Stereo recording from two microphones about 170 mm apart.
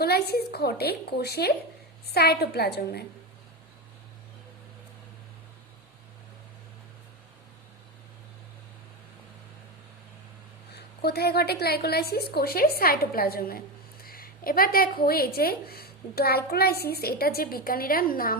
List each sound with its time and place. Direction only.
0.0 s a woman's voice: 70° left (ahead or behind)
10.7 s a woman's voice: 70° left (ahead or behind)